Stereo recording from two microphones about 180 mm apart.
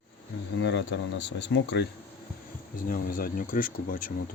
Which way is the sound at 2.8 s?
50° left (ahead or behind).